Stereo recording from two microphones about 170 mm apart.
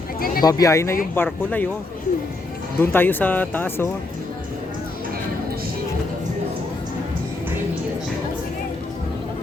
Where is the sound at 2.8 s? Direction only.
10° left (ahead or behind).